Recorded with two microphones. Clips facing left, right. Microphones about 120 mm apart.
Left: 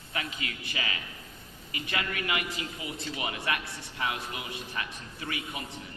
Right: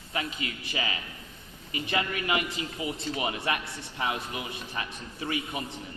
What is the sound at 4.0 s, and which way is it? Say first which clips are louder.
A man's voice: right 2 dB; 25° right (ahead or behind).